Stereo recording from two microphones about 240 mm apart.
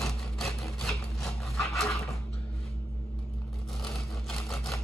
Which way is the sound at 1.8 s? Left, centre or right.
Centre.